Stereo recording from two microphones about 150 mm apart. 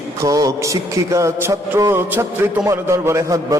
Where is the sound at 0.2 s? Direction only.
20° right (ahead or behind).